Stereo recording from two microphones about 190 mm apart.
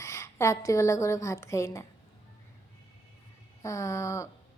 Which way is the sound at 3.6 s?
15° left (ahead or behind).